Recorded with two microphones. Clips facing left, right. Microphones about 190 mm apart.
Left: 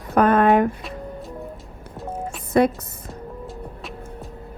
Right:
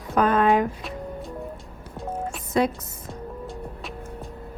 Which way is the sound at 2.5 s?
55° left (ahead or behind).